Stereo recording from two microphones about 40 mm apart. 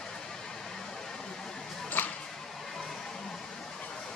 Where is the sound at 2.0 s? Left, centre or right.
Left.